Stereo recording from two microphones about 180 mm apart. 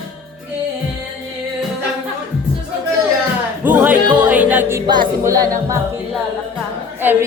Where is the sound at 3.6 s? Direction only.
10° right (ahead or behind).